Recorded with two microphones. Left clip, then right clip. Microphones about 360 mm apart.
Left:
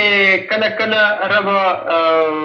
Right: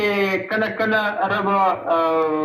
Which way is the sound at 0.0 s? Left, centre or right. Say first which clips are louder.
Left 8 dB; centre.